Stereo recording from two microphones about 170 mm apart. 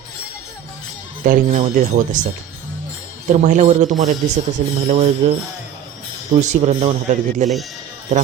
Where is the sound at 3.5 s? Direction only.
45° right (ahead or behind).